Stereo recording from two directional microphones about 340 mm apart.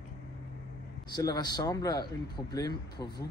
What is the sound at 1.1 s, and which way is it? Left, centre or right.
Speech, centre.